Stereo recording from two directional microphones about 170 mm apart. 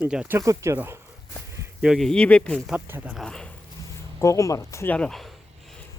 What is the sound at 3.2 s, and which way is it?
Speech, 5° left (ahead or behind).